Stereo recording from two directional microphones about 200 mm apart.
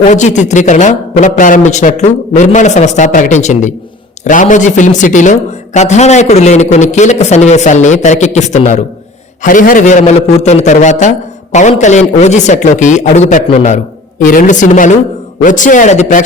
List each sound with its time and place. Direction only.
0.1 s a man's voice: 35° left (ahead or behind)